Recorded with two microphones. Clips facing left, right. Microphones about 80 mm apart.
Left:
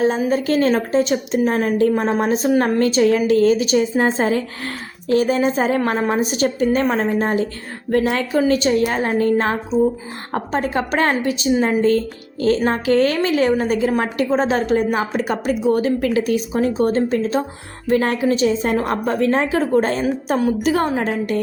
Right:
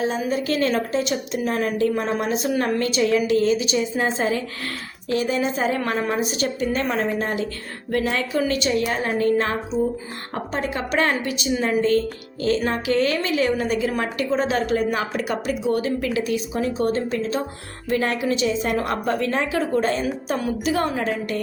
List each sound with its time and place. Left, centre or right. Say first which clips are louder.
0.0 s a woman's voice: left 5 dB; left
16.7 s a woman's voice: left 4 dB; left